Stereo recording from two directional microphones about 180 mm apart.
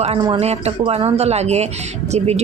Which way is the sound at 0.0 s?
35° right (ahead or behind).